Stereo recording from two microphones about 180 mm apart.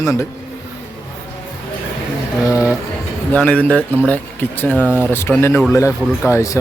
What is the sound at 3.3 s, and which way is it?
Speech, 10° left (ahead or behind).